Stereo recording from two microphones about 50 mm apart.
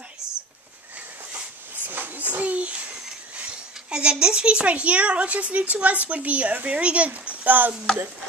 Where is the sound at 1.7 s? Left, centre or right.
Right.